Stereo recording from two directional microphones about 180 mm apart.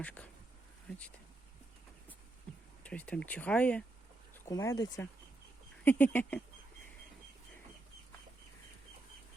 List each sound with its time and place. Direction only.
0.0 s speech: 5° left (ahead or behind)
2.8 s speech: 5° left (ahead or behind)
4.4 s speech: 20° left (ahead or behind)